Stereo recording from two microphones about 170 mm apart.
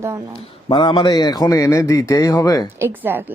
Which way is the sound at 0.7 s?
25° left (ahead or behind).